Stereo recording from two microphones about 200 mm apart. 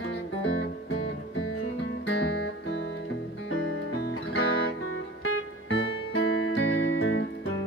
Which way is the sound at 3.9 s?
60° left (ahead or behind).